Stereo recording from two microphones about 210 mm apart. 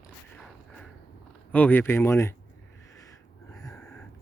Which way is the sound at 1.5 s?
10° left (ahead or behind).